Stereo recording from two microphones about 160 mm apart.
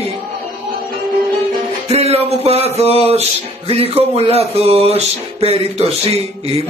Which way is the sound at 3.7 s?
40° right (ahead or behind).